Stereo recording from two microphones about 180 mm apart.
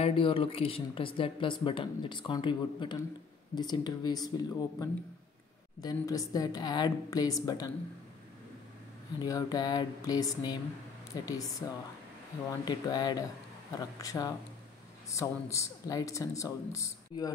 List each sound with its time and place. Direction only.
0.0 s speech: 30° left (ahead or behind)
9.2 s speech: 20° left (ahead or behind)